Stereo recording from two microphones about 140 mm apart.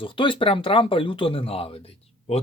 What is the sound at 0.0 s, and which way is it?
Speech, 35° left (ahead or behind).